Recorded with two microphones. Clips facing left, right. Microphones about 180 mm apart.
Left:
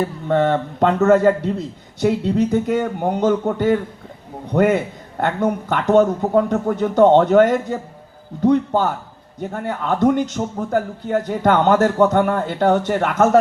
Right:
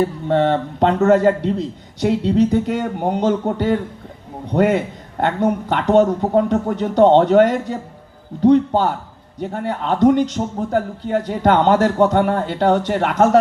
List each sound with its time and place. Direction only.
0.3 s speech: 45° left (ahead or behind)